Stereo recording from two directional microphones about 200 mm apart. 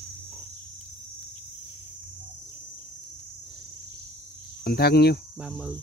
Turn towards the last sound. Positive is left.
turn(degrees=-5)  # may be behind; listen again after turning